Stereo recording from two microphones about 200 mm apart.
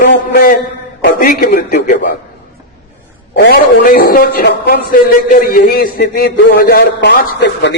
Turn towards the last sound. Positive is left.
turn(degrees=60)  # may be behind; listen again after turning